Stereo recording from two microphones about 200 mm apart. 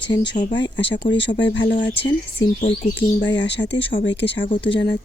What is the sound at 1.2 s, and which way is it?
Speech, 60° left (ahead or behind).